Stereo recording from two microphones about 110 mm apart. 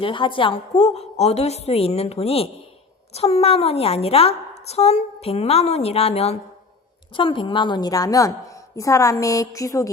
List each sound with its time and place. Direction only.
0.0 s a woman's voice: 50° left (ahead or behind); by 6.4 s 70° left (ahead or behind)
7.2 s a woman's voice: 50° left (ahead or behind); by 9.9 s 30° left (ahead or behind)